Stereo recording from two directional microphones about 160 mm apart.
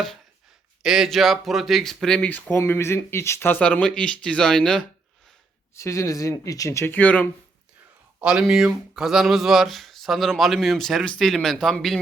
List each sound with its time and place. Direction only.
0.8 s speech: centre (ahead or behind)
5.7 s speech: 20° left (ahead or behind)
8.2 s speech: 5° right (ahead or behind)